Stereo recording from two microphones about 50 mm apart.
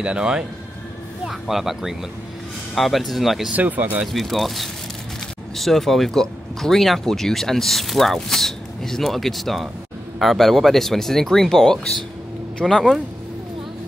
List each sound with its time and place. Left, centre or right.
0.0 s speech: centre
1.2 s speech: centre
3.5 s speech: right
4.1 s speech: centre
12.6 s speech: centre